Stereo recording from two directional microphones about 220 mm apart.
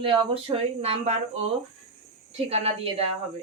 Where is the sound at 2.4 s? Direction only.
30° right (ahead or behind).